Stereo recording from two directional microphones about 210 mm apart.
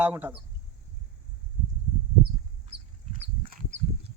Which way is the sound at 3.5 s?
40° right (ahead or behind).